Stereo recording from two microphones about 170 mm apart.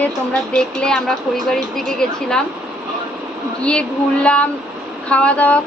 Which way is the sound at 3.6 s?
5° left (ahead or behind).